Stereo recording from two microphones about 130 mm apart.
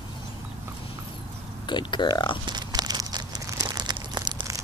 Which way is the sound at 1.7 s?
35° left (ahead or behind).